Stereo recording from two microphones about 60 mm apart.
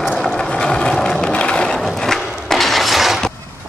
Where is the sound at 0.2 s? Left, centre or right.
Centre.